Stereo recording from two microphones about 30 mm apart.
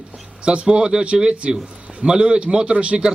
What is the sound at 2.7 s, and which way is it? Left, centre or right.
Speech, right.